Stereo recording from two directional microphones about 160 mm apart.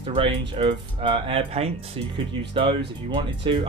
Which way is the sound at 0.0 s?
30° right (ahead or behind).